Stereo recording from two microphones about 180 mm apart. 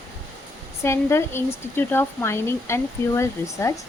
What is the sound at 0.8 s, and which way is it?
Speech, 15° left (ahead or behind).